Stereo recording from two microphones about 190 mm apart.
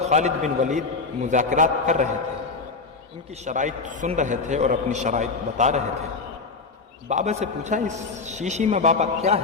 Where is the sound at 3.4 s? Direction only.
40° right (ahead or behind).